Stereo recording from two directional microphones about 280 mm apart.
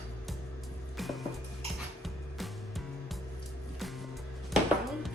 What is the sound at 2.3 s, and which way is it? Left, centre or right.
Music, centre.